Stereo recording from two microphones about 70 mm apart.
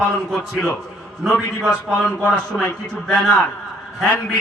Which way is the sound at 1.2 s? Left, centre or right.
Centre.